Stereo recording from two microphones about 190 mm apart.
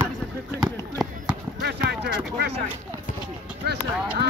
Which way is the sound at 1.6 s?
60° right (ahead or behind).